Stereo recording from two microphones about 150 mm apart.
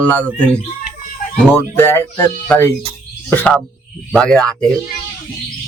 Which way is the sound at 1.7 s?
15° left (ahead or behind).